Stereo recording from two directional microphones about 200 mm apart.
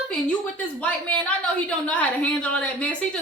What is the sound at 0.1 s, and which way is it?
A woman's voice, 5° left (ahead or behind).